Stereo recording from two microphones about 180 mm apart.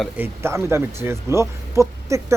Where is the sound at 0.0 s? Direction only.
10° right (ahead or behind).